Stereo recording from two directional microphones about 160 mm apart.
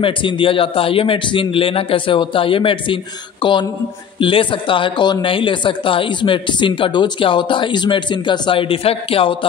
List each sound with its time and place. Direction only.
0.0 s speech: 30° left (ahead or behind)